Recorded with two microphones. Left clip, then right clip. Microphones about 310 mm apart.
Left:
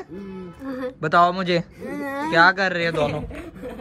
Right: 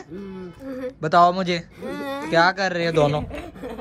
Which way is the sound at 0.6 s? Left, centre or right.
Centre.